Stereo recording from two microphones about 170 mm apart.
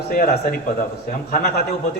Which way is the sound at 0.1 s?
60° left (ahead or behind).